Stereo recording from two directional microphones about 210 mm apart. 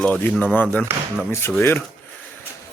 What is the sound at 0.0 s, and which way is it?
A man's voice, 10° left (ahead or behind).